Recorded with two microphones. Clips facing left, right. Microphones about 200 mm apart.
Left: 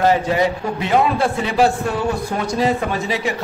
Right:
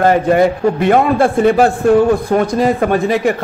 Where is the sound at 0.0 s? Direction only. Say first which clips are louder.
Right 5 dB; 55° right (ahead or behind).